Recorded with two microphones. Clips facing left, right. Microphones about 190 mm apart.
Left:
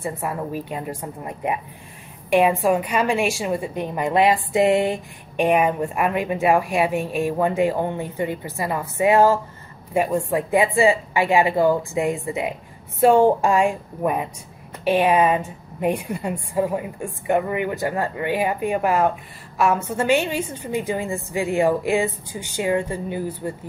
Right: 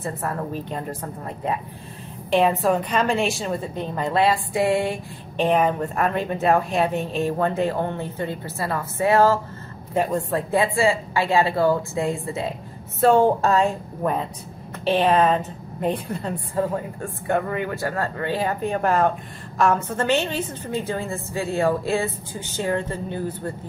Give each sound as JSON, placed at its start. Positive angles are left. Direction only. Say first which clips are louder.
{"t": 0.0, "sound": "a woman's voice", "louder": "left 1 dB", "side_deg": 10}